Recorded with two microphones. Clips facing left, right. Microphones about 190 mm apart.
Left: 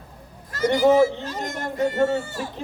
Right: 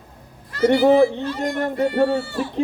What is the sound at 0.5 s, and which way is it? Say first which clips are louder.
Speech: right 3 dB; 45° left (ahead or behind).